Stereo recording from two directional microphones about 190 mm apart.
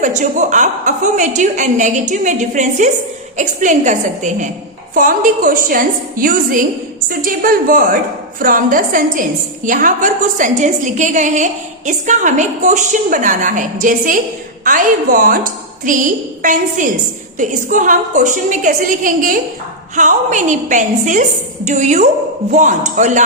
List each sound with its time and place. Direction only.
0.0 s a woman's voice: 40° right (ahead or behind)